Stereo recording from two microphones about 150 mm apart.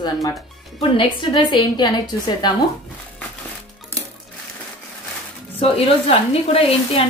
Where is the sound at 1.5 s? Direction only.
30° left (ahead or behind).